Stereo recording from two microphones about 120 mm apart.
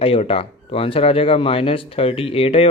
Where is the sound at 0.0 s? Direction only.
50° left (ahead or behind).